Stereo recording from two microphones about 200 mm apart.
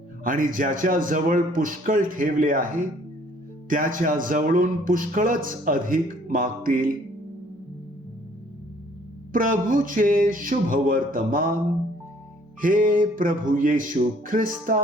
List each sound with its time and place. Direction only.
0.3 s speech: 45° right (ahead or behind)
9.3 s speech: 45° right (ahead or behind)
12.6 s speech: 45° right (ahead or behind)